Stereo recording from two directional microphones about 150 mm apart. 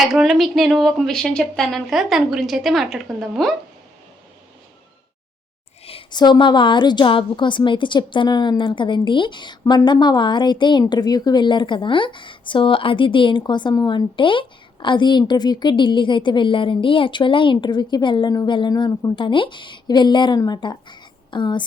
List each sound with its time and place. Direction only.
0.0 s speech: centre (ahead or behind)
5.8 s a woman's voice: 40° left (ahead or behind)